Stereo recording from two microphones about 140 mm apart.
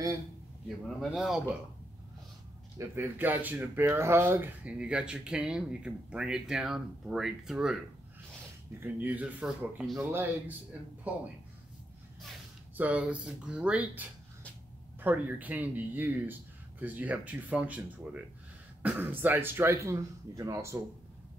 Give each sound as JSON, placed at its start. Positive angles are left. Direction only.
{"t": 0.7, "sound": "speech", "side_deg": 0}
{"t": 3.0, "sound": "speech", "side_deg": -15}
{"t": 8.7, "sound": "speech", "side_deg": -15}
{"t": 12.7, "sound": "speech", "side_deg": -10}